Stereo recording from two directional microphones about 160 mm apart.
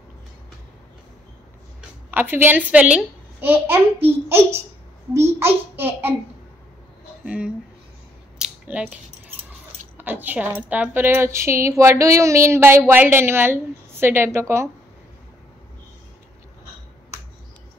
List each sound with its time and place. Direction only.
2.0 s a child's voice: 10° right (ahead or behind)
5.1 s speech: 15° right (ahead or behind)
7.2 s speech: 5° right (ahead or behind)
8.4 s a sound: 5° right (ahead or behind)
9.9 s speech: 10° right (ahead or behind)